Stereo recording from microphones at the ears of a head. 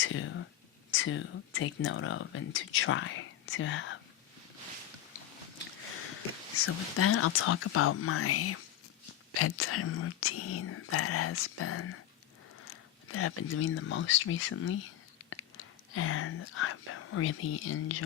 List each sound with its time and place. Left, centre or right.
0.0 s whispering: left
0.9 s speech: left
5.9 s speech: left